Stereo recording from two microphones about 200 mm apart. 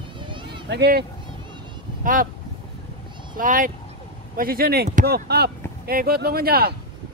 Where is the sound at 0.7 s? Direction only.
55° right (ahead or behind).